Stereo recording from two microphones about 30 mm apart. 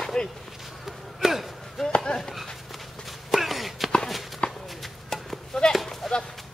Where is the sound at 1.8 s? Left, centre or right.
Centre.